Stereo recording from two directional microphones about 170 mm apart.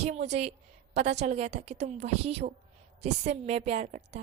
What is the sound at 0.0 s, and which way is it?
A woman's voice, 40° right (ahead or behind).